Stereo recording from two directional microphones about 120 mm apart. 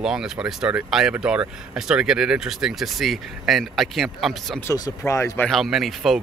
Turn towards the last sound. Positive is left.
turn(degrees=0)  # may be behind; listen again after turning